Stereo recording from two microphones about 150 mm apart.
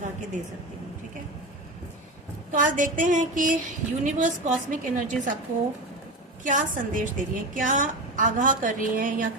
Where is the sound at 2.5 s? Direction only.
60° right (ahead or behind).